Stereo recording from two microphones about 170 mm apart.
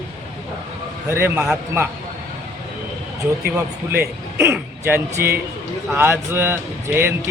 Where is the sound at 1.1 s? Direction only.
15° right (ahead or behind).